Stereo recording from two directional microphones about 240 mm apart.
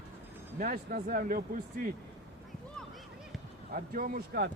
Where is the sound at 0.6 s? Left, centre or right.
Right.